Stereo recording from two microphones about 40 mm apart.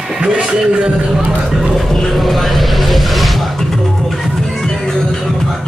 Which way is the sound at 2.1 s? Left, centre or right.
Centre.